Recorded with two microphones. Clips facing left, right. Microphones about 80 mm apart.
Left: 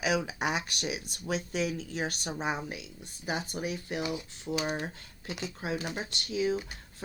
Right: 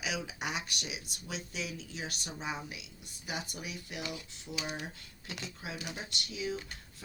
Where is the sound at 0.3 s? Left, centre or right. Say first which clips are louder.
Left 6 dB; left.